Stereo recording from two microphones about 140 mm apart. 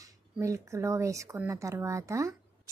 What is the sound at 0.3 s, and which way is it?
Speech, 20° right (ahead or behind).